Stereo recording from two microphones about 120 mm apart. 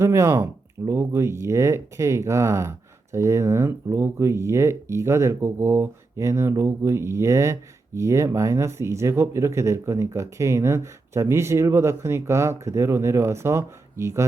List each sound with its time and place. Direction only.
0.0 s speech: 25° right (ahead or behind)